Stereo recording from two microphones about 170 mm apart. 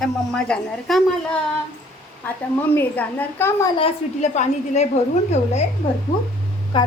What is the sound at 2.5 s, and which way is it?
A woman's voice, 10° left (ahead or behind).